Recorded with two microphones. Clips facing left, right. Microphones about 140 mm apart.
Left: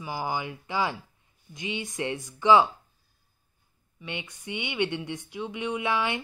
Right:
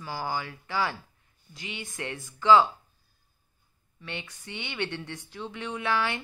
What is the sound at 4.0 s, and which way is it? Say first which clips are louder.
Speech: left 2 dB; 15° left (ahead or behind).